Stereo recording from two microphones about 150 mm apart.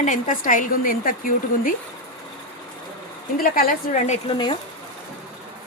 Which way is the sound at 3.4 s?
75° left (ahead or behind).